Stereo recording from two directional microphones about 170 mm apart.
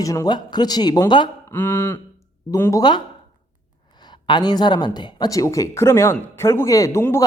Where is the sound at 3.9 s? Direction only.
25° left (ahead or behind).